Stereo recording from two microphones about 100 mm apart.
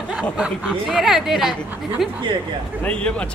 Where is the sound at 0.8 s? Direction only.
Centre (ahead or behind).